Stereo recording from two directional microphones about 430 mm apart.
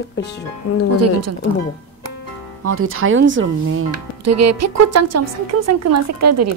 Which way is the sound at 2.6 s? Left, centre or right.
Right.